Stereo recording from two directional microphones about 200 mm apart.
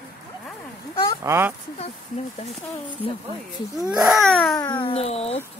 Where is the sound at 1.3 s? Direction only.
10° right (ahead or behind).